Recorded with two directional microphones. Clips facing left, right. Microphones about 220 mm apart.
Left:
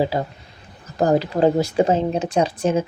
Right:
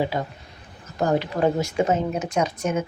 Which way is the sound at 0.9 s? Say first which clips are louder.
Left 4 dB; 35° left (ahead or behind).